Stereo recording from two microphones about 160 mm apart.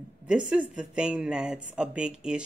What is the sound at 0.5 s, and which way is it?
Speech, 5° right (ahead or behind).